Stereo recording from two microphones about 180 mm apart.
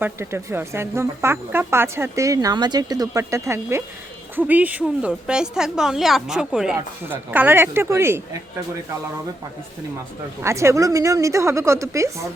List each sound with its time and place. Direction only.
0.0 s a woman's voice: 15° right (ahead or behind)
10.4 s a woman's voice: 15° right (ahead or behind)